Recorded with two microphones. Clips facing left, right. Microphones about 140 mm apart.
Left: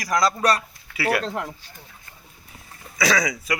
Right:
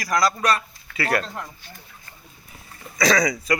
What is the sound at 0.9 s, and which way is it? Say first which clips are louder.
Speech: left 1 dB; 10° left (ahead or behind).